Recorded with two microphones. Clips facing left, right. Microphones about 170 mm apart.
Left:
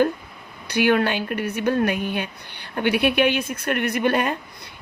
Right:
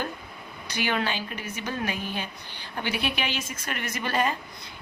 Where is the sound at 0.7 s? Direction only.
55° left (ahead or behind).